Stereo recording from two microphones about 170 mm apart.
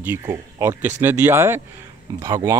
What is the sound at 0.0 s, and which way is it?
A man's voice, 10° right (ahead or behind).